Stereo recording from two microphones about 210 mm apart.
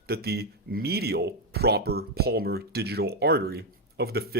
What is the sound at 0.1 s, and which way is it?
Speech, 50° right (ahead or behind).